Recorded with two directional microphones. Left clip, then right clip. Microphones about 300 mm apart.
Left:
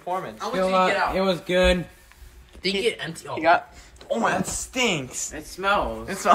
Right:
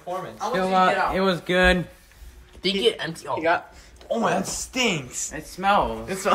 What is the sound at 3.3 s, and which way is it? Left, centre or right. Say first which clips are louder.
Speech: left 4 dB; centre.